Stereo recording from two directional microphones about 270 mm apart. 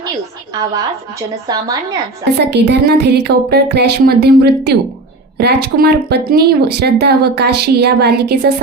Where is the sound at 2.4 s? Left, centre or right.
Right.